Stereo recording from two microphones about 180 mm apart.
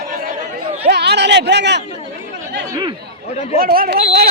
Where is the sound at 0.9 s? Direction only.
65° right (ahead or behind).